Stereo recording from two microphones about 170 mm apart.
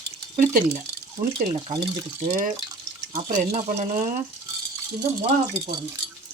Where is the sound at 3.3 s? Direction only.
45° right (ahead or behind).